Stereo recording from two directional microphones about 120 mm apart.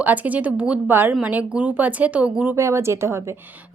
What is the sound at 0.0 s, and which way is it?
Speech, 15° right (ahead or behind).